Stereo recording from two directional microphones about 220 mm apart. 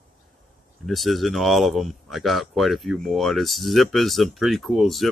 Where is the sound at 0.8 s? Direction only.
Centre (ahead or behind).